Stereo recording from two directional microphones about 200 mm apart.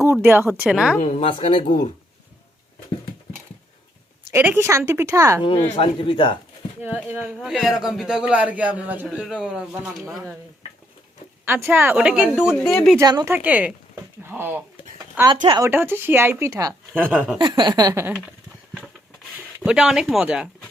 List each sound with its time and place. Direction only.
0.0 s a woman's voice: 10° right (ahead or behind)
1.0 s speech: 30° left (ahead or behind)
4.3 s a woman's voice: 10° right (ahead or behind)
5.4 s speech: 25° left (ahead or behind)
6.8 s speech: 5° right (ahead or behind)
11.4 s speech: 10° right (ahead or behind)
13.0 s a woman's voice: 15° right (ahead or behind)
15.4 s speech: 20° right (ahead or behind)
15.7 s a woman's voice: 10° right (ahead or behind)
17.3 s speech: 20° right (ahead or behind)
19.5 s speech: 5° right (ahead or behind)